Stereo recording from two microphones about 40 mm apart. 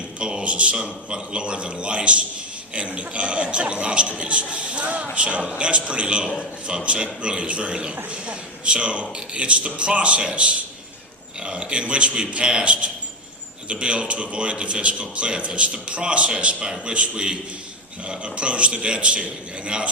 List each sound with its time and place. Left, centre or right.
0.2 s a man's voice: right